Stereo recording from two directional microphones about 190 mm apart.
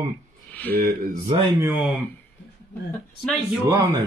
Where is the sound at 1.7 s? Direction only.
5° right (ahead or behind).